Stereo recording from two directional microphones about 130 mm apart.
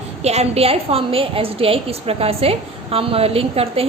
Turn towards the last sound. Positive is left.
turn(degrees=-50)  # may be behind; listen again after turning